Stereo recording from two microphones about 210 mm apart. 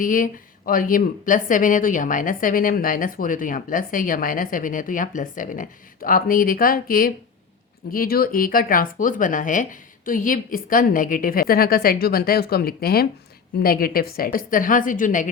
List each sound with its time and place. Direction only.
0.0 s a woman's voice: 40° left (ahead or behind)